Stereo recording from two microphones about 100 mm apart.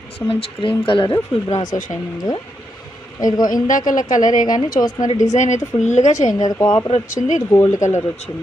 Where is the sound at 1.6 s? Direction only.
40° left (ahead or behind).